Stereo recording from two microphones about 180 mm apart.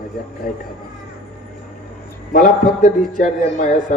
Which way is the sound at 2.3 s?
50° left (ahead or behind).